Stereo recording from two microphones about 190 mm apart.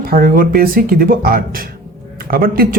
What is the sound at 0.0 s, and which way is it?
Speech, 50° right (ahead or behind).